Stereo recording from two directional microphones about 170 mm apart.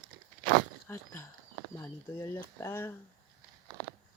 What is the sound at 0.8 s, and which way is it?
Speech, 15° left (ahead or behind).